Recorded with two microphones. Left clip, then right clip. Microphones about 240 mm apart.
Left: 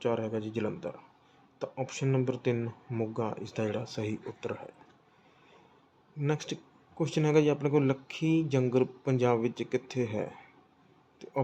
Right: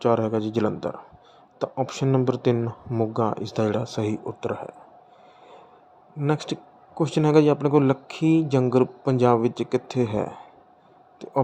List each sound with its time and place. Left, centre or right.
0.0 s speech: right
6.1 s speech: centre